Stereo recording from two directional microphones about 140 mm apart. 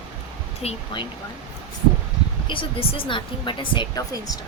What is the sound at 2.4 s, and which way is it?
Speech, 35° left (ahead or behind).